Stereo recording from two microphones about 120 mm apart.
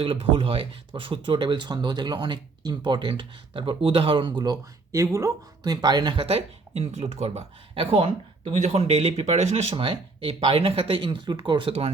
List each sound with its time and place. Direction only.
0.0 s speech: 50° right (ahead or behind)
6.2 s speech: 60° right (ahead or behind)
9.7 s speech: 45° right (ahead or behind)